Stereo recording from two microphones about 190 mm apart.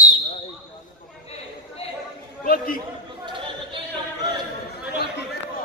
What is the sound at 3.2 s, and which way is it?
Chatter, 25° right (ahead or behind).